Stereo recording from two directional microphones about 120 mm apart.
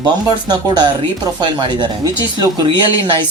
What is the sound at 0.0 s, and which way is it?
Speech, 35° right (ahead or behind).